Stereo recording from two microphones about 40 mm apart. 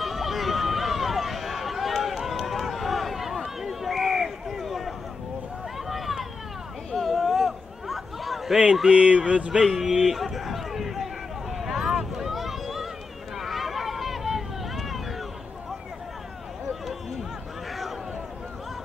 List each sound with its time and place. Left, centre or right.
0.0 s run: centre
5.9 s vehicle: centre
6.9 s chatter: centre
8.9 s speech: right
9.7 s run: centre
11.5 s vehicle: centre
13.4 s a sound: centre